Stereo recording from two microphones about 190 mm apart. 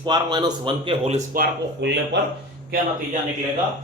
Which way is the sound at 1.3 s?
65° right (ahead or behind).